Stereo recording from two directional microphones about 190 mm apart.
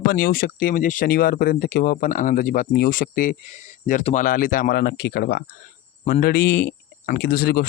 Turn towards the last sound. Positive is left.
turn(degrees=50)  # may be behind; listen again after turning